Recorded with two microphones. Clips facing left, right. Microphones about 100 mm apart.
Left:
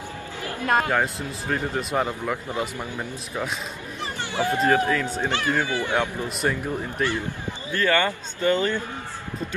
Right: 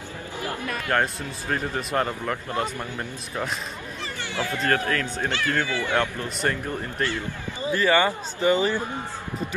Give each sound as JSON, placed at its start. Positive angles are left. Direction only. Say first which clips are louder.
{"t": 0.4, "sound": "music", "louder": "right 1 dB", "side_deg": -20}
{"t": 0.9, "sound": "speech", "louder": "even", "side_deg": 0}
{"t": 4.3, "sound": "speech", "louder": "left 4 dB", "side_deg": 20}
{"t": 5.2, "sound": "speech", "louder": "left 1 dB", "side_deg": 20}
{"t": 7.7, "sound": "speech", "louder": "right 1 dB", "side_deg": -10}